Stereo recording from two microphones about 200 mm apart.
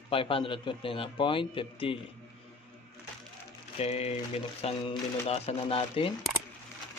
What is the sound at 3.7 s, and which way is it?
Mantra, 30° left (ahead or behind).